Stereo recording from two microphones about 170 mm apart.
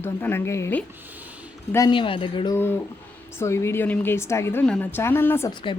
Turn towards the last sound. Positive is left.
turn(degrees=15)  # may be behind; listen again after turning